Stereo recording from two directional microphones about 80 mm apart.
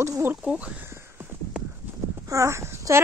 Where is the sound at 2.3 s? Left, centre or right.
Right.